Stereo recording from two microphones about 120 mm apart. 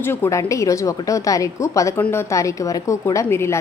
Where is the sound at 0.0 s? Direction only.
20° left (ahead or behind).